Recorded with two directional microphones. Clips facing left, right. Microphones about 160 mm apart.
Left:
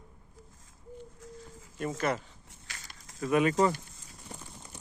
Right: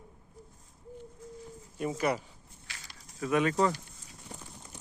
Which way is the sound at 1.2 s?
90° left.